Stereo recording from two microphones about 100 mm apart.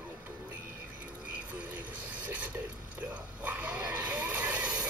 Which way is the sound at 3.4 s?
15° right (ahead or behind).